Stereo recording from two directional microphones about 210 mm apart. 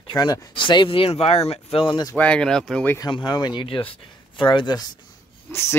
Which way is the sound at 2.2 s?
5° left (ahead or behind).